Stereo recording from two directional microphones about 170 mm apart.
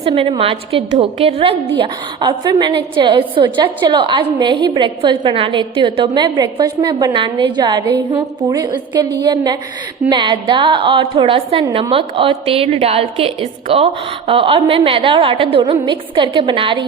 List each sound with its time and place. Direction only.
0.0 s a woman's voice: 35° right (ahead or behind)